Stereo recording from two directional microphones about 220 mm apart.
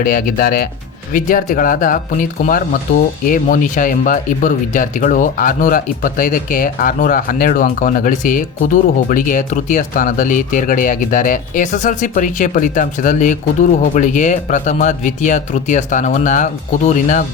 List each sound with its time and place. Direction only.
0.0 s speech: 40° left (ahead or behind)